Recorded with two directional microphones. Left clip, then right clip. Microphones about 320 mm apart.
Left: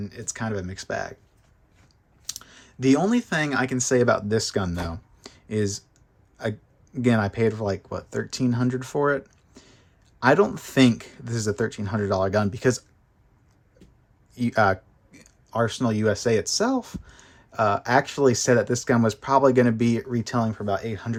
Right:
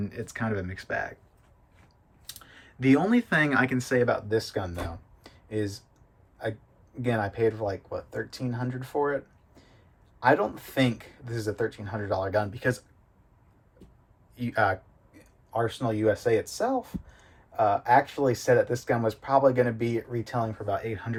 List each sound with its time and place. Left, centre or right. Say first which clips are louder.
0.0 s speech: left 1 dB; centre
2.2 s speech: left 8 dB; centre
5.2 s finger snapping: left 5 dB; left
7.0 s speech: left 4 dB; left
14.3 s speech: left 5 dB; centre